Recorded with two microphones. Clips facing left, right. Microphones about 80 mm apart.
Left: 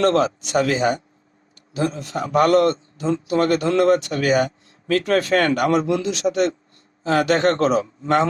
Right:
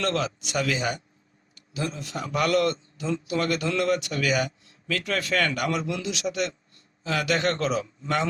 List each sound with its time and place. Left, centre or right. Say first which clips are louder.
0.0 s a man's voice: left 9 dB; left